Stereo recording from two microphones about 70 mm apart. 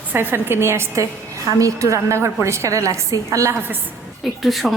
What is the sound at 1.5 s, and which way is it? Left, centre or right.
A woman's voice, right.